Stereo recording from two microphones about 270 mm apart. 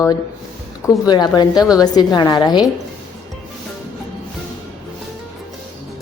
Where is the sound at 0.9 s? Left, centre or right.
Centre.